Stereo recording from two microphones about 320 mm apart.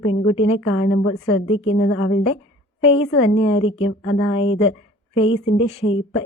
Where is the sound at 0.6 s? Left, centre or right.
Left.